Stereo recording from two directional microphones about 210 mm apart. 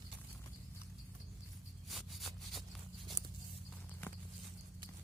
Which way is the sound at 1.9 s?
Centre (ahead or behind).